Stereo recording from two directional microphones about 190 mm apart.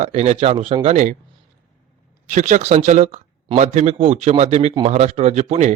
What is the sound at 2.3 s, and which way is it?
A man's voice, 40° right (ahead or behind).